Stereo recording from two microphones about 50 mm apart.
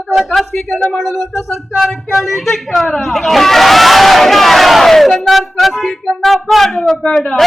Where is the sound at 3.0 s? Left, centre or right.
Centre.